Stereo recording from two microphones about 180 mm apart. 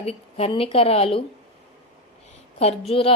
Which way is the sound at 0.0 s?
35° left (ahead or behind).